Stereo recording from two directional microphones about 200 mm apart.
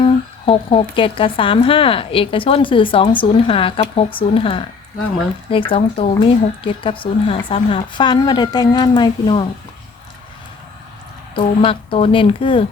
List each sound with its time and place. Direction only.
0.0 s a woman's voice: 25° left (ahead or behind)
11.3 s a woman's voice: 25° left (ahead or behind)